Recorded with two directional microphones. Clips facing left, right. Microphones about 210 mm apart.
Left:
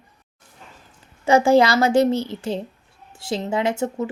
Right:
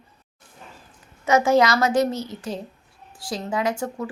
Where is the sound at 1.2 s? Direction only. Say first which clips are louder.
Left 3 dB; 30° left (ahead or behind).